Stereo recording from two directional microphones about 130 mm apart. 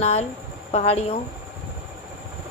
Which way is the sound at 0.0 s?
55° left (ahead or behind).